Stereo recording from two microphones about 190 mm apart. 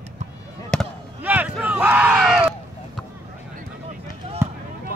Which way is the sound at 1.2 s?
10° right (ahead or behind).